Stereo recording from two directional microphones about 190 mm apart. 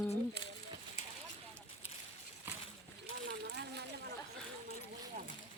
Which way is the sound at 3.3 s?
60° right (ahead or behind).